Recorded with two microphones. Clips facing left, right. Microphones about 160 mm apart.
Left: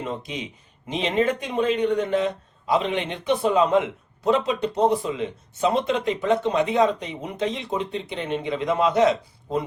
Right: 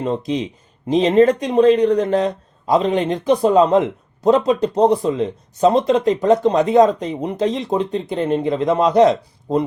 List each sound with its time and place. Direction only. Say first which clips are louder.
0.0 s speech: right 10 dB; 35° right (ahead or behind)